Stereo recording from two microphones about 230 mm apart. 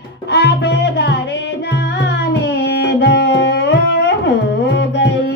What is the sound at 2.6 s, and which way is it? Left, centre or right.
Music, left.